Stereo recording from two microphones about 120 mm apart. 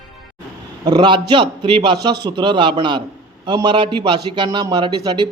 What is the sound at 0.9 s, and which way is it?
A man's voice, 40° right (ahead or behind).